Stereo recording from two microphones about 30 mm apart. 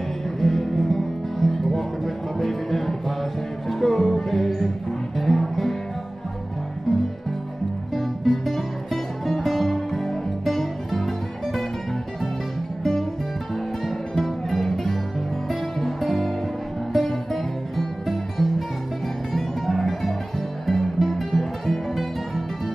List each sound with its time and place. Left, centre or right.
0.4 s music: centre
7.9 s music: centre
14.2 s music: centre